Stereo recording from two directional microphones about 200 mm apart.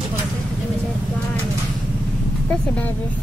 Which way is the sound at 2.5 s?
10° left (ahead or behind).